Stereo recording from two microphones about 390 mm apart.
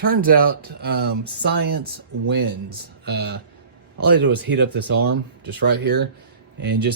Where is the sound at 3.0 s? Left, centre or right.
Right.